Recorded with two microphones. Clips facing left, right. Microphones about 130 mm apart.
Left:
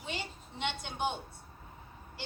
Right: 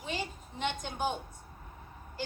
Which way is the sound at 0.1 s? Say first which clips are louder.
Right 3 dB; 40° right (ahead or behind).